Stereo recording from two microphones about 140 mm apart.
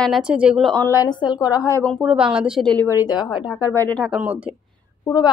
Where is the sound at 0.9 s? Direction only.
30° left (ahead or behind).